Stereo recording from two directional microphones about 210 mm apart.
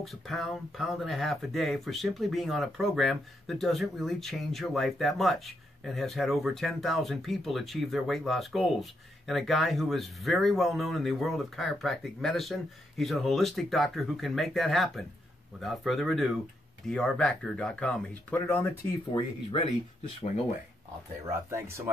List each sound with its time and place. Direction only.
0.0 s speech: centre (ahead or behind)
20.2 s speech: 30° left (ahead or behind)
21.5 s speech: 15° right (ahead or behind)